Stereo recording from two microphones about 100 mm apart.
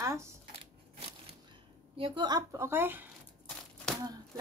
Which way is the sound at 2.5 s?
25° right (ahead or behind).